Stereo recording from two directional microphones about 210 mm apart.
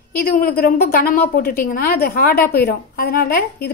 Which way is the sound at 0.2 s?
45° left (ahead or behind).